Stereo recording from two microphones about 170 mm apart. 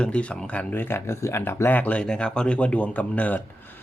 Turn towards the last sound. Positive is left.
turn(degrees=10)  # may be behind; listen again after turning